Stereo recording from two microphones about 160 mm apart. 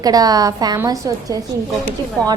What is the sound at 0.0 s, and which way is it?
Speech, 25° right (ahead or behind).